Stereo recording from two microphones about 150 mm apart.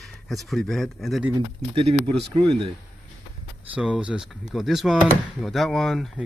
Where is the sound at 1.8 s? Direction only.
45° right (ahead or behind).